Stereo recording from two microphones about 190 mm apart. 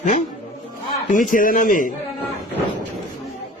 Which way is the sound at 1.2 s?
45° left (ahead or behind).